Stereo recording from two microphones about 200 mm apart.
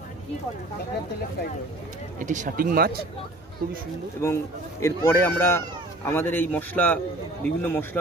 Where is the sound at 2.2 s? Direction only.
40° right (ahead or behind).